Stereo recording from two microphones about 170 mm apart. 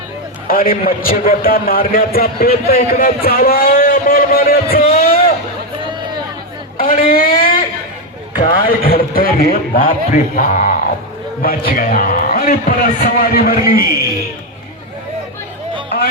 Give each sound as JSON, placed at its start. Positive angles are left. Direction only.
{"t": 0.4, "sound": "a man's voice", "side_deg": 60}
{"t": 6.7, "sound": "a man's voice", "side_deg": 55}